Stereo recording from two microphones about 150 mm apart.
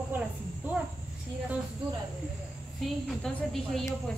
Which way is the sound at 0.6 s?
10° right (ahead or behind).